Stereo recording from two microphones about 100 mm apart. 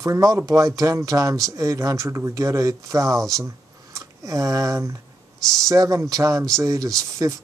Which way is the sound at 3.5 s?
35° right (ahead or behind).